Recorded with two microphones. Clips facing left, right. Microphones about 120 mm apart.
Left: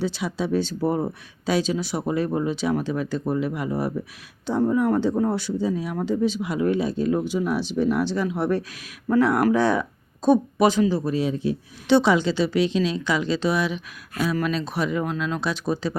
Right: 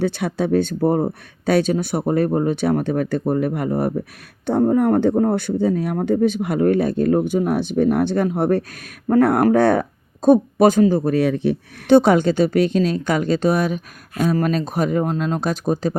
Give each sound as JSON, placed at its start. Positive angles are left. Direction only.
{"t": 0.0, "sound": "speech", "side_deg": -55}